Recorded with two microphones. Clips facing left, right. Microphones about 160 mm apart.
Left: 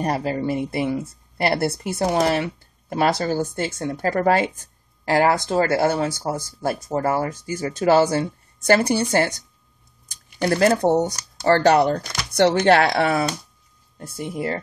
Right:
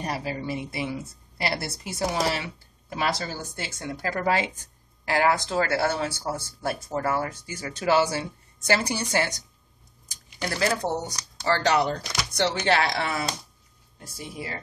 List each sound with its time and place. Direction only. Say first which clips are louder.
0.0 s speech: left 8 dB; 50° left (ahead or behind)
5.0 s speech: left 5 dB; 40° left (ahead or behind); by 14.6 s 55° left (ahead or behind)